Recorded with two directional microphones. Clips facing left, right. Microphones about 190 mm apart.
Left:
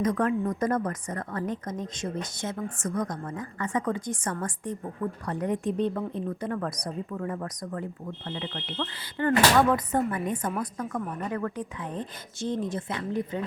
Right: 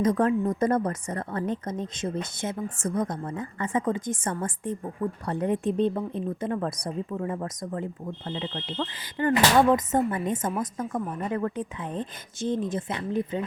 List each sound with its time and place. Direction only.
0.0 s speech: 30° right (ahead or behind)